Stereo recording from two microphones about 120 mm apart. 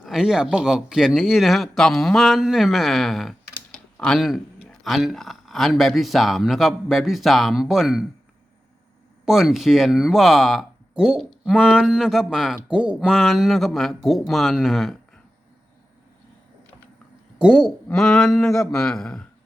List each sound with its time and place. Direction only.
0.0 s speech: 5° right (ahead or behind)
9.2 s speech: centre (ahead or behind)
17.3 s speech: 5° right (ahead or behind)